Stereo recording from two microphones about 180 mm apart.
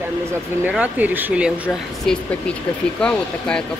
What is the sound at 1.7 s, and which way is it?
A woman's voice, 5° left (ahead or behind).